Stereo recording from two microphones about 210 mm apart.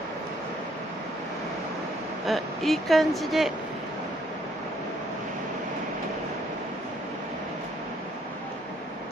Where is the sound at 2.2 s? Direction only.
Centre (ahead or behind).